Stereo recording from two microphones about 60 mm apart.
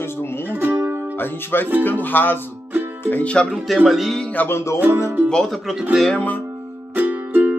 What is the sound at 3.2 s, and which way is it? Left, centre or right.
Speech, centre.